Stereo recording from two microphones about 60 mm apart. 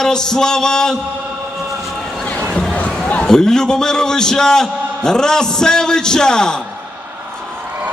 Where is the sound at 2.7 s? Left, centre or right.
Left.